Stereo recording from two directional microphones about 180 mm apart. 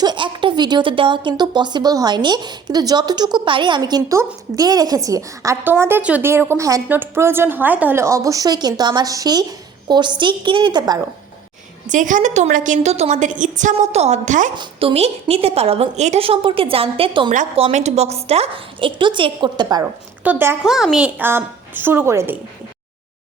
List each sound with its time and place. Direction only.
0.0 s speech: 25° right (ahead or behind)
11.9 s a woman's voice: 45° right (ahead or behind)
14.5 s a woman's voice: 30° right (ahead or behind)
17.2 s a woman's voice: 40° right (ahead or behind); by 19.8 s 25° right (ahead or behind)
19.8 s a woman's voice: 10° right (ahead or behind)